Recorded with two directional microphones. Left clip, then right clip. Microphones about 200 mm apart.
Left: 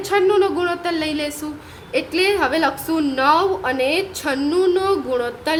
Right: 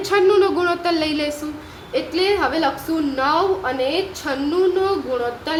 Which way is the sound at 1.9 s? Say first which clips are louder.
Left 1 dB; 30° left (ahead or behind).